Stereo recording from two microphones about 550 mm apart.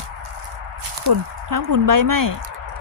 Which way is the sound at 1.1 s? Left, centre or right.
Right.